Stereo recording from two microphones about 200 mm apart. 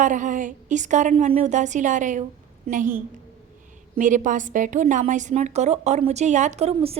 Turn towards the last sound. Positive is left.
turn(degrees=-30)  # may be behind; listen again after turning